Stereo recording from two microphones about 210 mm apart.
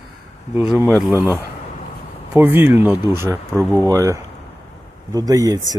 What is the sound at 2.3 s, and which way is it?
Speech, 10° right (ahead or behind).